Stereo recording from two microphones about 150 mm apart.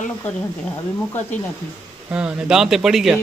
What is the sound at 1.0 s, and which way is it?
Speech, 15° left (ahead or behind).